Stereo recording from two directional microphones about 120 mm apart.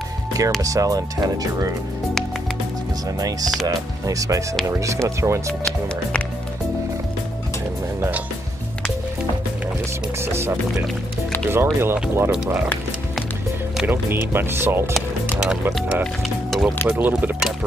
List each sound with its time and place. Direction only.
0.6 s speech: 30° right (ahead or behind)
3.2 s speech: 30° right (ahead or behind)
10.2 s speech: 20° right (ahead or behind)
11.5 s speech: 20° right (ahead or behind)
13.8 s speech: 20° right (ahead or behind)
15.0 s music: 5° right (ahead or behind)
15.9 s speech: centre (ahead or behind)
16.8 s speech: 15° right (ahead or behind)